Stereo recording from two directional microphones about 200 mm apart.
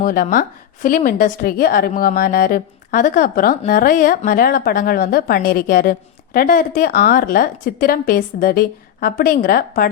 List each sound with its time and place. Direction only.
0.0 s a woman's voice: 45° left (ahead or behind)